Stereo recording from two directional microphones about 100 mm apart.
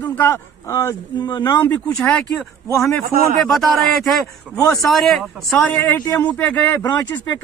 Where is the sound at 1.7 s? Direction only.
15° left (ahead or behind).